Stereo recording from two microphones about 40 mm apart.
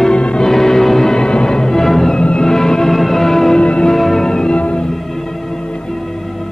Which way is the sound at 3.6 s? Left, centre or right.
Left.